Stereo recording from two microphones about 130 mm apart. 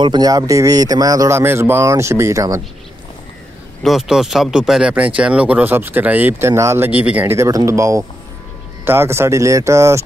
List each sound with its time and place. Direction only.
0.0 s speech: 30° right (ahead or behind)
3.8 s speech: centre (ahead or behind)
7.3 s speech: 25° right (ahead or behind)